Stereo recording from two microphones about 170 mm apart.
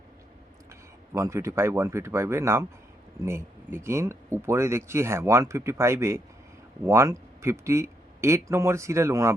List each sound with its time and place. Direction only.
0.7 s speech: 15° right (ahead or behind)